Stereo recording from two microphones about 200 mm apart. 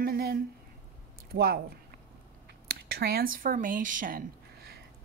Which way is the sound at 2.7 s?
50° right (ahead or behind).